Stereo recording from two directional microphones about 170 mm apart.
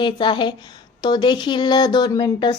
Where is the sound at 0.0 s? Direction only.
30° left (ahead or behind).